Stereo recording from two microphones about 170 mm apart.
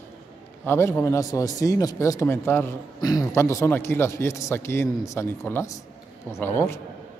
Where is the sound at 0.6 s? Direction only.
15° left (ahead or behind).